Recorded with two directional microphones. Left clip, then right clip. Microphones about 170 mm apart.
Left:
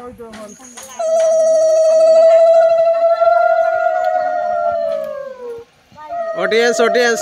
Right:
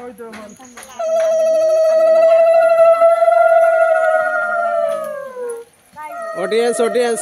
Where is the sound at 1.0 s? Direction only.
35° right (ahead or behind).